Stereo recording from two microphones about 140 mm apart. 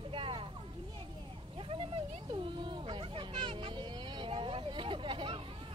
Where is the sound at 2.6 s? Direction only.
40° right (ahead or behind).